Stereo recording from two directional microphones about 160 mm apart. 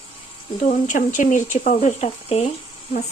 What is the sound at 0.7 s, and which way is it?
Speech, 50° left (ahead or behind).